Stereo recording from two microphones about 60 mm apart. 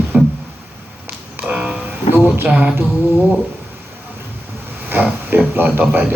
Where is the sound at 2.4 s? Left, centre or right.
Right.